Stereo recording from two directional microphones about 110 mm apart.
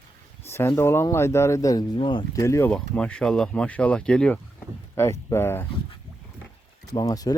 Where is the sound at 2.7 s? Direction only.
10° left (ahead or behind).